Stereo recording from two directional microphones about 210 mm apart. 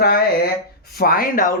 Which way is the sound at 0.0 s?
45° left (ahead or behind).